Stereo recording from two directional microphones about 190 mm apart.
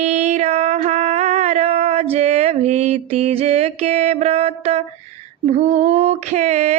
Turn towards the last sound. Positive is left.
turn(degrees=-35)  # may be behind; listen again after turning